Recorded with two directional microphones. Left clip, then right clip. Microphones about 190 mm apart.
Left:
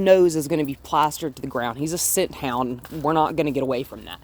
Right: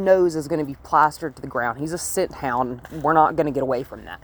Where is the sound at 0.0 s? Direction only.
45° left (ahead or behind).